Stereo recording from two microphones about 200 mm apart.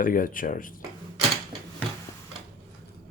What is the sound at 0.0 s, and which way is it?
Speech, 45° left (ahead or behind).